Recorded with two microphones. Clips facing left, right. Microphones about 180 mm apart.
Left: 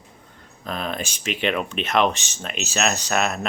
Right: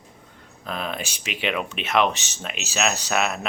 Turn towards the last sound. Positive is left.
turn(degrees=-5)  # may be behind; listen again after turning